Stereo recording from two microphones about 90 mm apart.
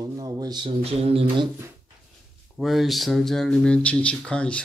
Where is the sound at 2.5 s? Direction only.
Centre (ahead or behind).